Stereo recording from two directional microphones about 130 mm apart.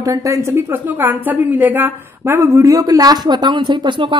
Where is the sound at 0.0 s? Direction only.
25° right (ahead or behind).